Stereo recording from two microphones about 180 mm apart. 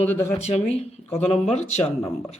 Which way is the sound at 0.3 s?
35° left (ahead or behind).